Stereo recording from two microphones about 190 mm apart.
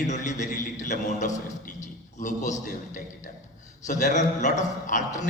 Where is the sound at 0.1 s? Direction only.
40° left (ahead or behind).